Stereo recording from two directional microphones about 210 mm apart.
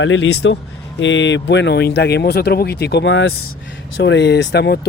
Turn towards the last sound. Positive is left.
turn(degrees=55)  # may be behind; listen again after turning